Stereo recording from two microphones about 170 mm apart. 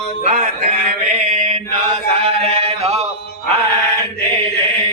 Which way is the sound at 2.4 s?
40° right (ahead or behind).